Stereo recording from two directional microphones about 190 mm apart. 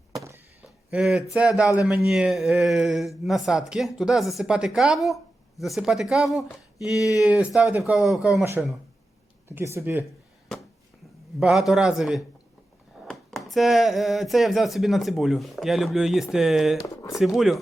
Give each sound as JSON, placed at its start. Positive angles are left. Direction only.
{"t": 0.1, "sound": "a sound", "side_deg": -15}
{"t": 0.9, "sound": "speech", "side_deg": -5}
{"t": 9.5, "sound": "speech", "side_deg": -15}
{"t": 11.3, "sound": "speech", "side_deg": 0}
{"t": 13.0, "sound": "a sound", "side_deg": 0}
{"t": 13.5, "sound": "speech", "side_deg": 0}
{"t": 16.8, "sound": "speech", "side_deg": 15}
{"t": 17.2, "sound": "speech", "side_deg": 0}